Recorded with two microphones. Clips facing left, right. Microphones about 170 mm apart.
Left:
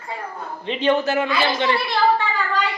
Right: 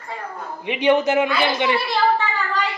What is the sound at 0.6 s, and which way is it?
Speech, 15° right (ahead or behind).